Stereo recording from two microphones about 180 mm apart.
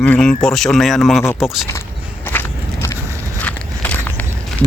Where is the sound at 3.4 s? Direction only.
10° left (ahead or behind).